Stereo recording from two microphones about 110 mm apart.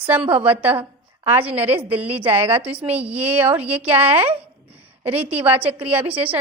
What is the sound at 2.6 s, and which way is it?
Speech, 60° right (ahead or behind).